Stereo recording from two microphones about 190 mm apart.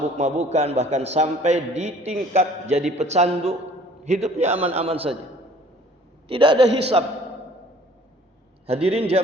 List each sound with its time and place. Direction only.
0.2 s a man's voice: 35° right (ahead or behind)
6.2 s a man's voice: 25° right (ahead or behind)
8.6 s a man's voice: 30° right (ahead or behind)